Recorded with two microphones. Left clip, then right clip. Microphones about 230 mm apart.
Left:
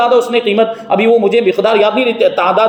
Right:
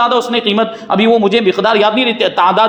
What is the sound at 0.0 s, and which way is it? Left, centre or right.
A man's voice, right.